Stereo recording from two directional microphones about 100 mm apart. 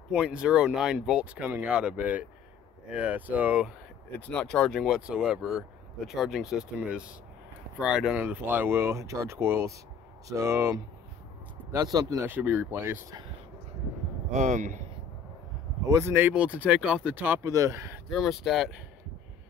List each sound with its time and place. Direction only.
0.1 s speech: 10° right (ahead or behind)
4.3 s speech: 10° left (ahead or behind); by 12.3 s 35° right (ahead or behind)
12.3 s speech: 20° right (ahead or behind)
15.9 s speech: 25° right (ahead or behind)
17.4 s speech: 35° right (ahead or behind)
18.1 s speech: 5° right (ahead or behind)